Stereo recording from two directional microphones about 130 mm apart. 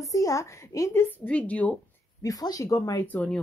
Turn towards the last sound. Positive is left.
turn(degrees=10)  # may be behind; listen again after turning